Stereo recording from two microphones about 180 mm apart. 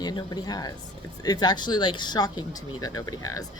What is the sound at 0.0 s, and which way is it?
A woman's voice, 20° left (ahead or behind).